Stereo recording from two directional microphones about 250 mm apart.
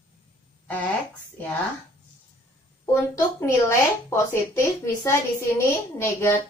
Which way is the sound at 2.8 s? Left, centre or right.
Centre.